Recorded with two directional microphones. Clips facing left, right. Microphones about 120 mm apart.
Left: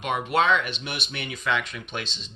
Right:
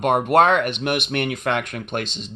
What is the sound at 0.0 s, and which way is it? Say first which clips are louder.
Speech: right 8 dB; 50° right (ahead or behind).